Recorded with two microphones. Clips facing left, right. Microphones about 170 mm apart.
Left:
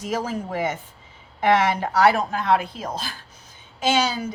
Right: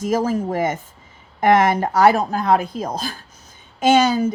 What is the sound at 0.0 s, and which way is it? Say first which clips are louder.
A woman's voice: right 7 dB; 45° right (ahead or behind).